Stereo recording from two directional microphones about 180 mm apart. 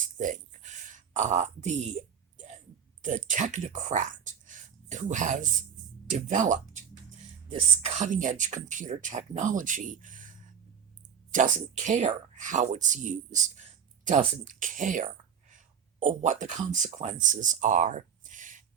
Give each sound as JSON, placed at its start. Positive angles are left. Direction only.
{"t": 0.0, "sound": "a sound", "side_deg": -45}
{"t": 3.2, "sound": "speech", "side_deg": -45}
{"t": 7.8, "sound": "a woman's voice", "side_deg": -40}